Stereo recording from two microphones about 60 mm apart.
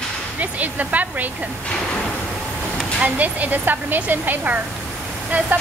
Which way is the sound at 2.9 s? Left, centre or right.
Right.